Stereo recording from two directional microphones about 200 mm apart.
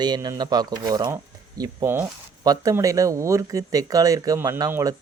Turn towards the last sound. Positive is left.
turn(degrees=-15)  # may be behind; listen again after turning